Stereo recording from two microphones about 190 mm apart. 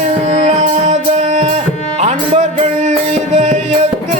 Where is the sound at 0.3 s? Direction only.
35° right (ahead or behind).